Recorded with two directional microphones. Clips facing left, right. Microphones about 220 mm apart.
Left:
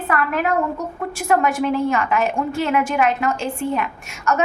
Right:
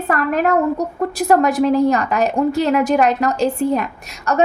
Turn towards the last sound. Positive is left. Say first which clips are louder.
# right 2 dB
turn(degrees=-35)  # may be behind; listen again after turning